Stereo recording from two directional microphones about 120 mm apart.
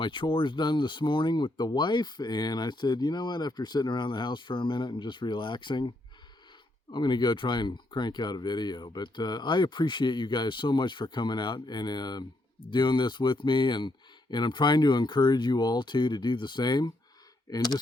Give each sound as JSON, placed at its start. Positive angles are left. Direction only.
{"t": 0.0, "sound": "speech", "side_deg": 45}
{"t": 6.9, "sound": "speech", "side_deg": 40}